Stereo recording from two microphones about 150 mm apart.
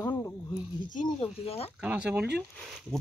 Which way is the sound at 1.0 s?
40° left (ahead or behind).